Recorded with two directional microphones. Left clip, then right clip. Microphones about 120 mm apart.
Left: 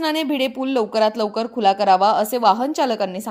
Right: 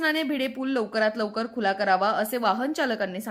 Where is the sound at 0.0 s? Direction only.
25° left (ahead or behind).